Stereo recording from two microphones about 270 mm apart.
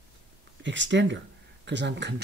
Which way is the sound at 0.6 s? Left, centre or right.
Right.